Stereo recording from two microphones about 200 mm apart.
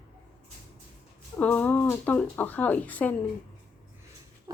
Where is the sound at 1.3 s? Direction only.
10° left (ahead or behind).